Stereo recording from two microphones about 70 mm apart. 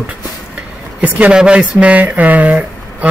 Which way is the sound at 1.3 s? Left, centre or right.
Centre.